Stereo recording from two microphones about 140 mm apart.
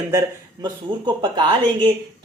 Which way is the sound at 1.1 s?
30° right (ahead or behind).